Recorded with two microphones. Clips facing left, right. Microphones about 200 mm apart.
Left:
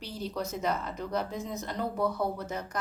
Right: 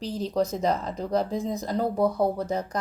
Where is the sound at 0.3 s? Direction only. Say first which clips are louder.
Right 7 dB; 35° right (ahead or behind).